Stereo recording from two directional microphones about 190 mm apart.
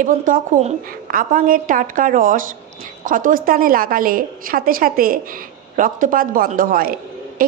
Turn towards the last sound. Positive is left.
turn(degrees=-50)  # may be behind; listen again after turning